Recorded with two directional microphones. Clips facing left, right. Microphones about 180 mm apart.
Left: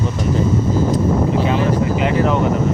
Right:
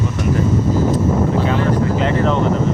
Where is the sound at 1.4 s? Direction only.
15° left (ahead or behind).